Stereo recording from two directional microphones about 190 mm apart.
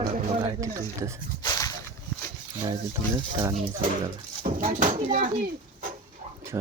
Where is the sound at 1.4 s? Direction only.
20° left (ahead or behind).